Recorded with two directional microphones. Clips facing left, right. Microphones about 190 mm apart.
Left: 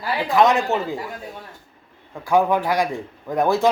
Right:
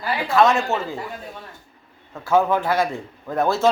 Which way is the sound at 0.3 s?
15° left (ahead or behind).